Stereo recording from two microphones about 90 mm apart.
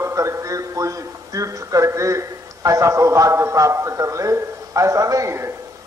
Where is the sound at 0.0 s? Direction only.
35° right (ahead or behind).